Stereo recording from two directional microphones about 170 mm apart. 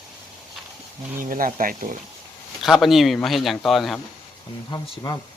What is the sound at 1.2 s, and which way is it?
Speech, 55° right (ahead or behind).